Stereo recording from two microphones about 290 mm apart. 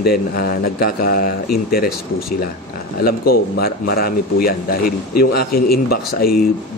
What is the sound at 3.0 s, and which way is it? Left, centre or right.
Speech, left.